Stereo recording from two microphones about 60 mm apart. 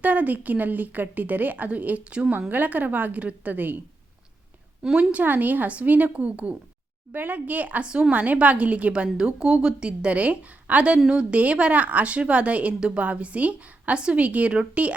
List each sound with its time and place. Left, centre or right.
0.0 s speech: right
2.5 s speech: right
4.8 s a woman's voice: centre
5.1 s a woman's voice: right